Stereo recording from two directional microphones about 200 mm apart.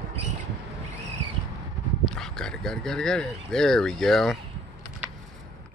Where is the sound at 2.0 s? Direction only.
5° left (ahead or behind).